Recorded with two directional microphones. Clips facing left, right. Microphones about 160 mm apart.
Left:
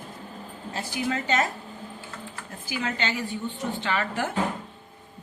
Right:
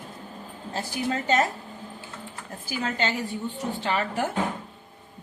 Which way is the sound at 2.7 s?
40° right (ahead or behind).